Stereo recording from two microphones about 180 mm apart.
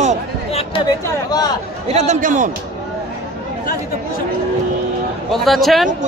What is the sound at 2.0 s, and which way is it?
Speech, 40° right (ahead or behind).